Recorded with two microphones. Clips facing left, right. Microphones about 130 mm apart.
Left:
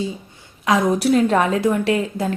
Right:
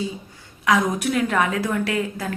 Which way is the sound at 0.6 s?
25° left (ahead or behind).